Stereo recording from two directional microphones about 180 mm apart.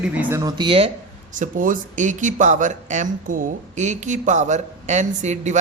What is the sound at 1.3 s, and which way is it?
Speech, 45° right (ahead or behind).